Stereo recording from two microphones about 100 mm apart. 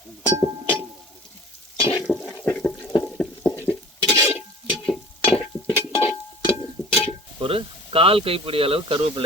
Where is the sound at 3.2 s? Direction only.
10° left (ahead or behind).